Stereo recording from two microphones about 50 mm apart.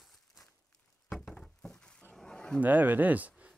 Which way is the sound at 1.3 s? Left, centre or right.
Centre.